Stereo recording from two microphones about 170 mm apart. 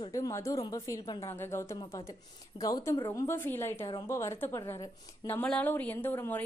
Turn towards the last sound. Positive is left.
turn(degrees=10)  # may be behind; listen again after turning